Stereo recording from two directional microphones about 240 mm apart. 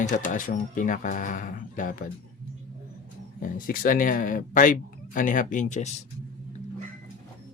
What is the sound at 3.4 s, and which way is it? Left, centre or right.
Speech, left.